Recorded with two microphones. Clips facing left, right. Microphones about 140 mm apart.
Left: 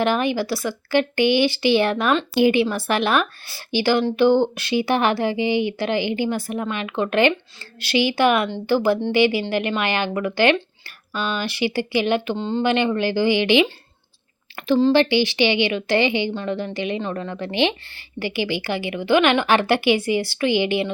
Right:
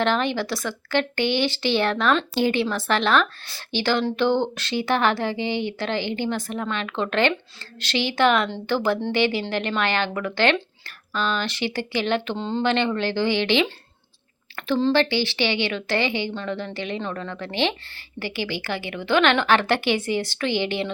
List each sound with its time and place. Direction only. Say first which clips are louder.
0.0 s a woman's voice: left 2 dB; 10° left (ahead or behind)
12.6 s a woman's voice: left 2 dB; 10° left (ahead or behind)
14.9 s a woman's voice: left 4 dB; 15° left (ahead or behind)